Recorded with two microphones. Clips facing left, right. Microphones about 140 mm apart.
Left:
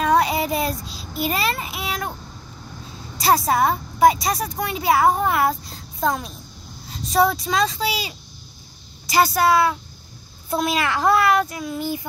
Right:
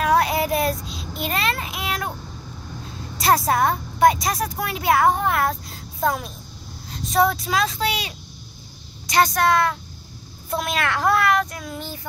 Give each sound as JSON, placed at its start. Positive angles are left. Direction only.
{"t": 0.0, "sound": "child singing", "side_deg": 0}
{"t": 3.2, "sound": "a woman's voice", "side_deg": 0}